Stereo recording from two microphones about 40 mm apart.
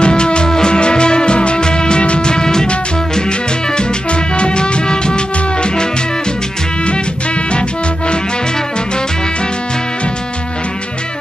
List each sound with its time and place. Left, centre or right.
0.0 s music: left